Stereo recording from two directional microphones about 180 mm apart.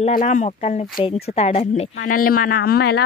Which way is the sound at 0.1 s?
45° left (ahead or behind).